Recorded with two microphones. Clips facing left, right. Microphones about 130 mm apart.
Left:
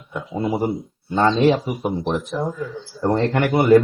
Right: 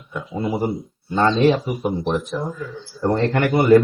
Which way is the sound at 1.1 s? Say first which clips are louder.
Even; 10° left (ahead or behind).